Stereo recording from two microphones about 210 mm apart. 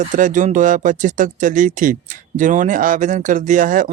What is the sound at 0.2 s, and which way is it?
Speech, 35° right (ahead or behind).